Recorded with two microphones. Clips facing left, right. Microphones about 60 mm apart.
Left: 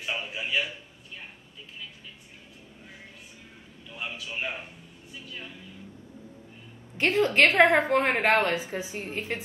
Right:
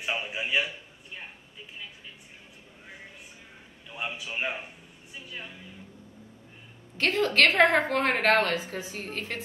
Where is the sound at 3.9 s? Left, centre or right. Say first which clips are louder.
Right 2 dB; centre.